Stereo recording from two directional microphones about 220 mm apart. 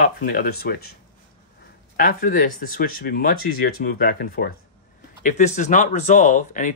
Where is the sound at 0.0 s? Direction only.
40° left (ahead or behind).